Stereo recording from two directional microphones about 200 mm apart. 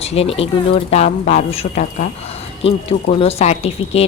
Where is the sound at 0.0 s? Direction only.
30° left (ahead or behind).